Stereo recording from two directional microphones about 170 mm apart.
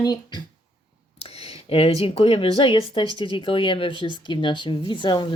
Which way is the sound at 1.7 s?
35° left (ahead or behind).